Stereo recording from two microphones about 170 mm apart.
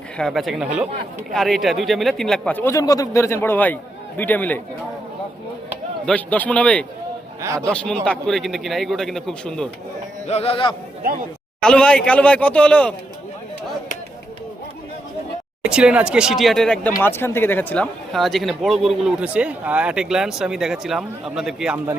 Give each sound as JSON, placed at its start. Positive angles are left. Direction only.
{"t": 0.2, "sound": "speech", "side_deg": 0}
{"t": 6.1, "sound": "speech", "side_deg": 10}
{"t": 7.4, "sound": "a man's voice", "side_deg": -15}
{"t": 7.7, "sound": "speech", "side_deg": 5}
{"t": 10.2, "sound": "speech", "side_deg": 35}
{"t": 11.6, "sound": "speech", "side_deg": 5}
{"t": 15.6, "sound": "speech", "side_deg": -5}
{"t": 18.1, "sound": "speech", "side_deg": 0}